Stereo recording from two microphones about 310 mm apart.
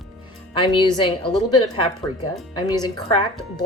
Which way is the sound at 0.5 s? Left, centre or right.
Centre.